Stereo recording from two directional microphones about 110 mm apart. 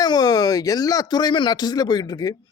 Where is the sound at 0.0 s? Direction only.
35° left (ahead or behind).